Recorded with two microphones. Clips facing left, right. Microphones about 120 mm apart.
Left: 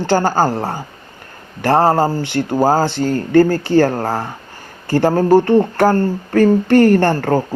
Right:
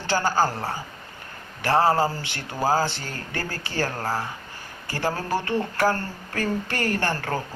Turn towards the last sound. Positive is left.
turn(degrees=50)  # may be behind; listen again after turning